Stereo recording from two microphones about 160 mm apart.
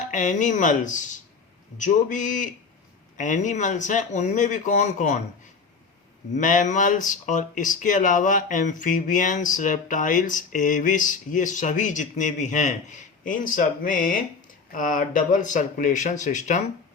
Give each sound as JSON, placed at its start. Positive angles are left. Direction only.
{"t": 0.1, "sound": "speech", "side_deg": 50}
{"t": 6.3, "sound": "speech", "side_deg": 55}